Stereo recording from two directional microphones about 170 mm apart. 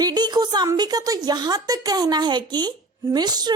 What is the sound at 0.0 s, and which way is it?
A woman's voice, 25° right (ahead or behind).